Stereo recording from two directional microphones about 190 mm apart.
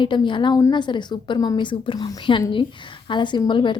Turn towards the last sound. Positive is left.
turn(degrees=25)  # may be behind; listen again after turning